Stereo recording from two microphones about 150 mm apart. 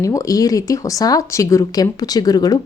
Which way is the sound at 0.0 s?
20° left (ahead or behind).